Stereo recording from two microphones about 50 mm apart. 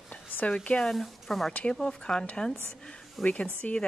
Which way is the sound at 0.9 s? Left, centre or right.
Centre.